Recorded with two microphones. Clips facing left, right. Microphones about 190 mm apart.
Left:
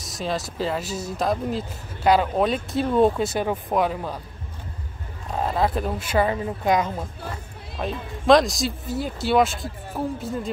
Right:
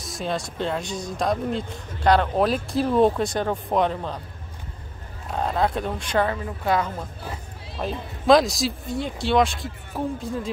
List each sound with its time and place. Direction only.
0.0 s speech: centre (ahead or behind)
5.3 s a woman's voice: centre (ahead or behind)
7.8 s speech: centre (ahead or behind)